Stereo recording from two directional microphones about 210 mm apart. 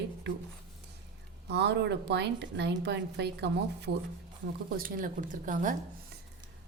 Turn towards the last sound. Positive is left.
turn(degrees=-40)  # may be behind; listen again after turning